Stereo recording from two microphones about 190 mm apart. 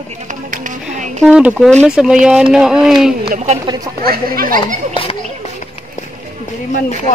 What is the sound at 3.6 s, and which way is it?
Speech, 20° right (ahead or behind).